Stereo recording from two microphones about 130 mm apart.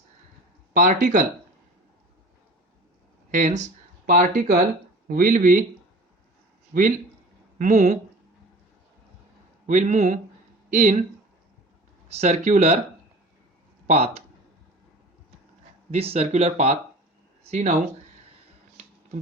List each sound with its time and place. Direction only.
0.7 s speech: 85° right
3.3 s speech: 70° right (ahead or behind)
6.7 s speech: 90° right
7.6 s speech: 65° right (ahead or behind)
9.6 s speech: 65° right (ahead or behind)
12.0 s speech: 55° right (ahead or behind)
13.8 s speech: 55° right (ahead or behind)
15.9 s speech: 50° right (ahead or behind)